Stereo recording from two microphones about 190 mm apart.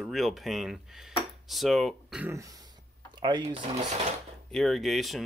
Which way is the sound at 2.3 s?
15° right (ahead or behind).